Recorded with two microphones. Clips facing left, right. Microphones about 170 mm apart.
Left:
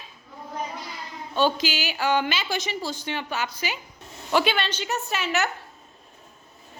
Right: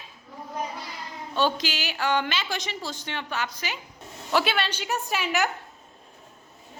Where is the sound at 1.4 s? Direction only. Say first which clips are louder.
Left 2 dB; centre (ahead or behind).